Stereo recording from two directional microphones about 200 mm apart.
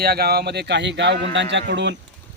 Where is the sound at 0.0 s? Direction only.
50° right (ahead or behind).